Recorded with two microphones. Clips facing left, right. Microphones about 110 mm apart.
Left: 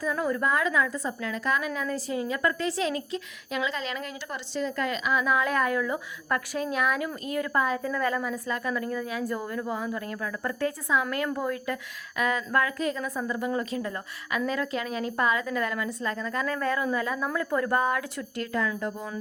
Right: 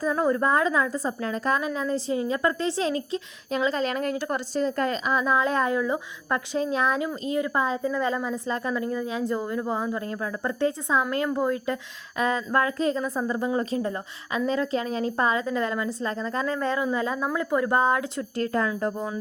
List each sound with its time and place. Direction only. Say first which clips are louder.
0.0 s a woman's voice: right 4 dB; 30° right (ahead or behind)
18.5 s speech: right 2 dB; 40° right (ahead or behind)